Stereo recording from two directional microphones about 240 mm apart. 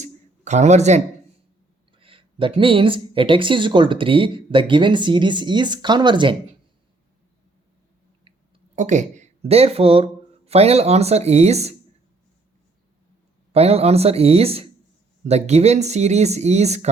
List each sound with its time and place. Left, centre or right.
0.0 s a sound: right
2.0 s speech: right
8.7 s speech: right
13.5 s speech: right